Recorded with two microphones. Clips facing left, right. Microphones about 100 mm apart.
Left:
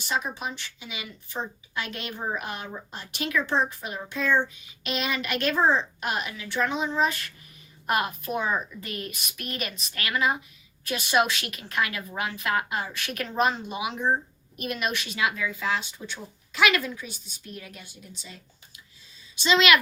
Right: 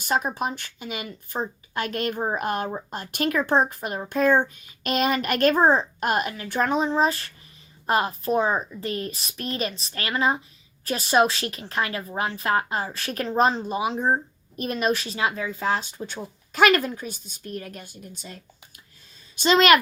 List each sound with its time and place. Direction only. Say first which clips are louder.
0.0 s a woman's voice: right 5 dB; 45° right (ahead or behind)